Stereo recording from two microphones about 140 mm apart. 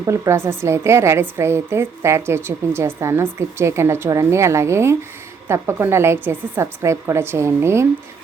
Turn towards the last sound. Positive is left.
turn(degrees=-20)  # may be behind; listen again after turning